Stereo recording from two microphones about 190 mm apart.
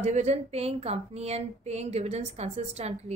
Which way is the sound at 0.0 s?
35° right (ahead or behind).